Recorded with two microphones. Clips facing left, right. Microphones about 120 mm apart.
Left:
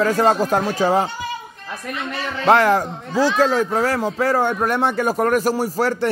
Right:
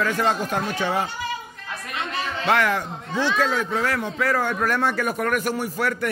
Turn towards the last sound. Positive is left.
turn(degrees=30)  # may be behind; listen again after turning